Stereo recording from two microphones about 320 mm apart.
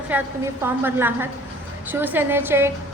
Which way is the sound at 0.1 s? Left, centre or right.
Centre.